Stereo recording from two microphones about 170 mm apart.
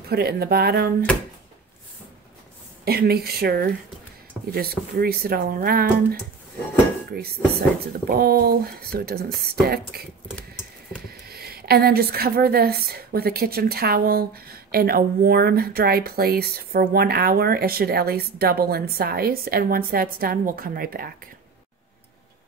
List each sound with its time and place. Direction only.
0.1 s speech: 65° right (ahead or behind)
2.8 s a woman's voice: 65° right (ahead or behind)
7.1 s a woman's voice: 65° right (ahead or behind)
11.2 s a woman's voice: 65° right (ahead or behind)